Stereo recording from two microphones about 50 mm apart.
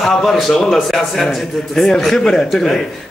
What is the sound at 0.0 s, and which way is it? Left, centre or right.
A man's voice, centre.